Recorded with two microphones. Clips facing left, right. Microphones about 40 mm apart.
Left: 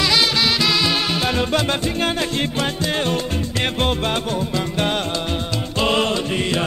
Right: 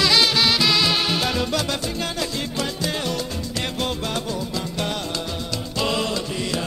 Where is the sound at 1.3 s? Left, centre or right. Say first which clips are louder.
Left 4 dB; left.